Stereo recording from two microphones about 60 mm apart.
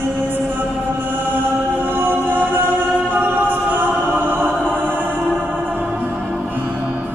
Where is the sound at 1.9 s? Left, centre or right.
Right.